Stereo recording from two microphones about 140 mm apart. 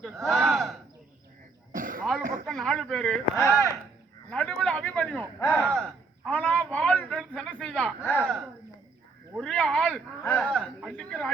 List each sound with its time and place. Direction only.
0.2 s a sound: centre (ahead or behind)
1.7 s cough: 75° right (ahead or behind)
2.5 s a man's voice: 5° left (ahead or behind)
8.2 s speech: 10° right (ahead or behind)
9.4 s speech: 5° left (ahead or behind)